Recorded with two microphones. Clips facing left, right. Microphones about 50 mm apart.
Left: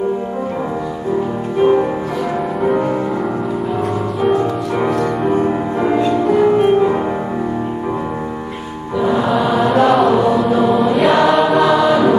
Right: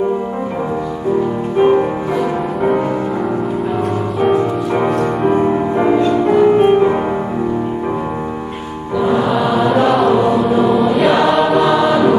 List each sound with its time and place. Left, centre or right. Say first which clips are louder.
2.6 s music: right 1 dB; centre
4.8 s music: even; centre
9.0 s music: even; centre
9.8 s chant: even; centre
10.6 s choir: right 1 dB; centre